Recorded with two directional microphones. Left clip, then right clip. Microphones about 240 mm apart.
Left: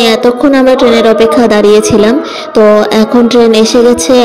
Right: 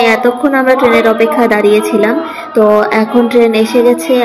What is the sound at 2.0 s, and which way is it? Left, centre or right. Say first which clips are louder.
A woman's voice: left 4 dB; left.